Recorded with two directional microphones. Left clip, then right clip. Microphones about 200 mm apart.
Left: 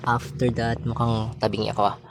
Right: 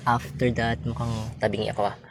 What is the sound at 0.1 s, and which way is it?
Speech, 20° left (ahead or behind).